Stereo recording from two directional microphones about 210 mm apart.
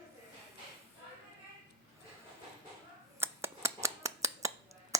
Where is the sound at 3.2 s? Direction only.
10° right (ahead or behind).